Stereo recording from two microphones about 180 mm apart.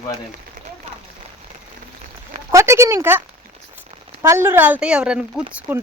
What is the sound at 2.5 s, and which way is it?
Speech, 15° right (ahead or behind).